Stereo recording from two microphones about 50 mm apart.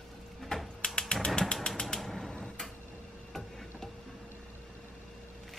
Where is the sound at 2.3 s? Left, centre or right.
Centre.